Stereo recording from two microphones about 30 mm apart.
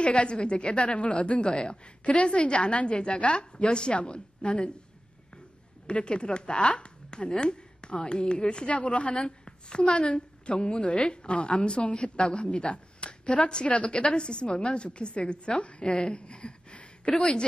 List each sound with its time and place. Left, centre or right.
0.0 s speech: left
5.9 s speech: left
8.8 s a woman's voice: left
9.4 s a woman's voice: left
16.2 s a sound: left
17.2 s a woman's voice: left